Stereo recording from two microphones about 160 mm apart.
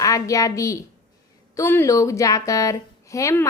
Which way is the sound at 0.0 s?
20° left (ahead or behind).